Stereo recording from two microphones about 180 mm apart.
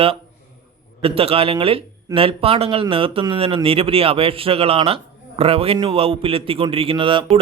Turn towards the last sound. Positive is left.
turn(degrees=-30)  # may be behind; listen again after turning